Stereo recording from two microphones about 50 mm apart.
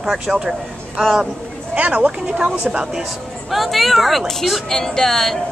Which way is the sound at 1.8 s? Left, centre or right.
Right.